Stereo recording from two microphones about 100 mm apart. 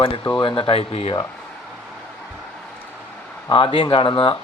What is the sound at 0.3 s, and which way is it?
Speech, 55° left (ahead or behind).